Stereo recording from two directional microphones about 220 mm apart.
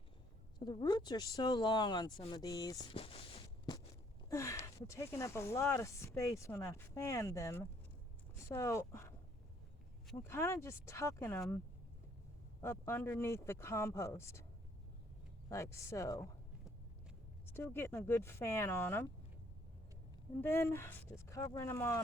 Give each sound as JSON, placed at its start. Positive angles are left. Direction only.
{"t": 0.6, "sound": "speech", "side_deg": 20}
{"t": 4.3, "sound": "speech", "side_deg": 15}
{"t": 10.2, "sound": "speech", "side_deg": 10}
{"t": 12.6, "sound": "speech", "side_deg": 10}
{"t": 15.4, "sound": "speech", "side_deg": 15}
{"t": 17.5, "sound": "speech", "side_deg": 10}
{"t": 20.4, "sound": "speech", "side_deg": 10}